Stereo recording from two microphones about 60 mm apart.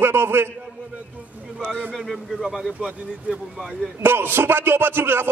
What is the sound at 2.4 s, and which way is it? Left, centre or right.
Speech, centre.